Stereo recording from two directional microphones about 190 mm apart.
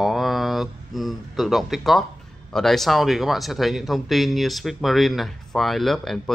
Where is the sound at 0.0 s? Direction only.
Centre (ahead or behind).